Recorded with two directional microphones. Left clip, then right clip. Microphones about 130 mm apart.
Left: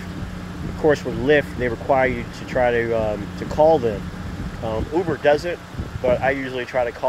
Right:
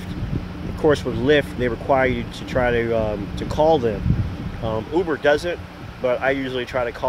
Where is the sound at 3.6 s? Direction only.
30° right (ahead or behind).